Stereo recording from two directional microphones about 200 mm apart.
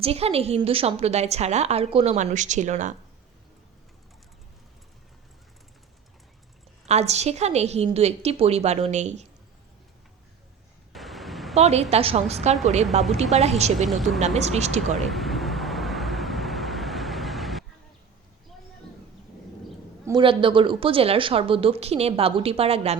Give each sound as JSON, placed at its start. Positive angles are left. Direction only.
{"t": 0.0, "sound": "a woman's voice", "side_deg": -30}
{"t": 6.8, "sound": "a woman's voice", "side_deg": -35}
{"t": 10.9, "sound": "a sound", "side_deg": 0}
{"t": 11.5, "sound": "a woman's voice", "side_deg": -30}
{"t": 13.8, "sound": "speech", "side_deg": 0}
{"t": 14.3, "sound": "a woman's voice", "side_deg": -35}
{"t": 14.9, "sound": "vehicle", "side_deg": 0}
{"t": 20.1, "sound": "speech", "side_deg": -25}